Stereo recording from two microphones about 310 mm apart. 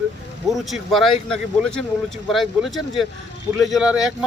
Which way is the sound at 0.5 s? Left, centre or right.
Centre.